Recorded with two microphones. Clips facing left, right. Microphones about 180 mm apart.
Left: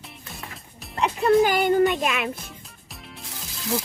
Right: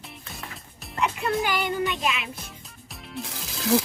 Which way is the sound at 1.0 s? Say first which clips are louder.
Left 7 dB; 35° left (ahead or behind).